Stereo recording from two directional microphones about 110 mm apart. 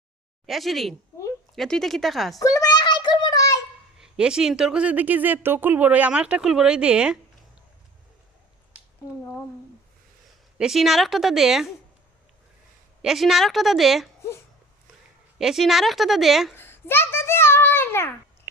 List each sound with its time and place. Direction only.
0.4 s a woman's voice: centre (ahead or behind)
2.4 s a sound: 30° left (ahead or behind)
4.0 s speech: 5° right (ahead or behind)
10.6 s a woman's voice: centre (ahead or behind)
13.0 s a woman's voice: centre (ahead or behind)
15.4 s a woman's voice: 5° right (ahead or behind)
16.6 s a sound: 20° left (ahead or behind)